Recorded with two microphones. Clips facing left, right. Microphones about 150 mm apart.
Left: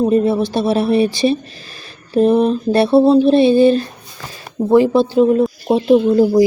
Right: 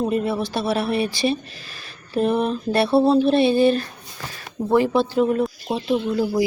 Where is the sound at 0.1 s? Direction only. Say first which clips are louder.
Left 8 dB; 25° left (ahead or behind).